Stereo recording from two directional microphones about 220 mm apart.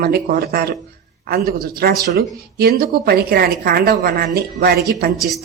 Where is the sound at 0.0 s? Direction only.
45° right (ahead or behind).